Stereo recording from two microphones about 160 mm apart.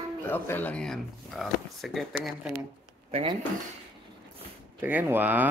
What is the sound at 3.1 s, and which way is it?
Speech, 35° right (ahead or behind).